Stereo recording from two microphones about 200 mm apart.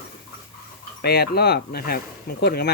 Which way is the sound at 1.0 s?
50° left (ahead or behind).